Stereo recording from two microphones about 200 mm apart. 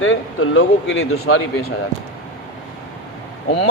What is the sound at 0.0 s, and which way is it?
Speech, 85° left.